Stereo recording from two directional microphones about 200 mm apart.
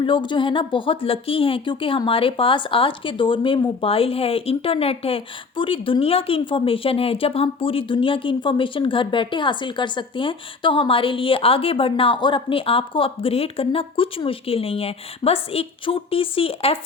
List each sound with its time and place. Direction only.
0.0 s a woman's voice: 25° left (ahead or behind)